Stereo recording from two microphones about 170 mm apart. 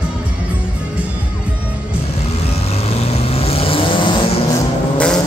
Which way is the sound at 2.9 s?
35° left (ahead or behind).